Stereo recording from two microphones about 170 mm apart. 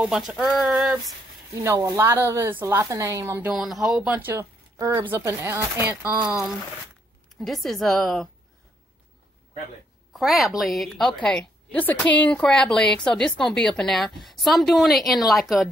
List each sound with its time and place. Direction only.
0.0 s a woman's voice: 5° right (ahead or behind)
1.6 s a woman's voice: 20° right (ahead or behind)
3.4 s a woman's voice: centre (ahead or behind)
10.1 s a woman's voice: centre (ahead or behind)